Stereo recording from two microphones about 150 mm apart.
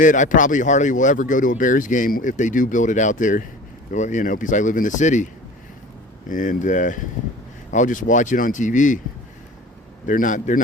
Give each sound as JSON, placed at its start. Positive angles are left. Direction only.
{"t": 0.0, "sound": "speech", "side_deg": 60}
{"t": 10.1, "sound": "speech", "side_deg": 60}